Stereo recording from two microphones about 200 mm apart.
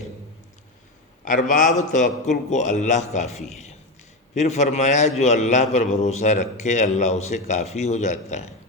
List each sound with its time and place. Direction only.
1.2 s a man's voice: 40° left (ahead or behind)